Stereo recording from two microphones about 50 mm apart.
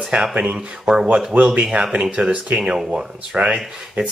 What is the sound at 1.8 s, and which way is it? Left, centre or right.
Speech, right.